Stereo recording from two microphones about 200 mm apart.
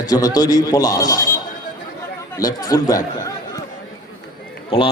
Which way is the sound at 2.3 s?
20° left (ahead or behind).